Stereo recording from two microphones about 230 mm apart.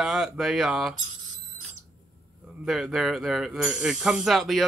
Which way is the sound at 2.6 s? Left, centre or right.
Centre.